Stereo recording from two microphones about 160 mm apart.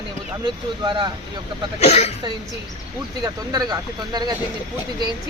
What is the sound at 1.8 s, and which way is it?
Speech, 45° left (ahead or behind).